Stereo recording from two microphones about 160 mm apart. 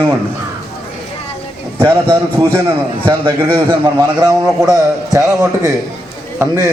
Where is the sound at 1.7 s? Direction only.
30° right (ahead or behind).